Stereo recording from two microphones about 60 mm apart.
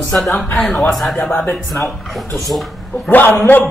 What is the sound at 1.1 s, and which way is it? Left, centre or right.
Speech, left.